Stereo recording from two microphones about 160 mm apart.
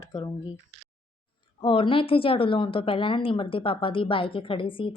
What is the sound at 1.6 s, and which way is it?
A woman's voice, 35° left (ahead or behind).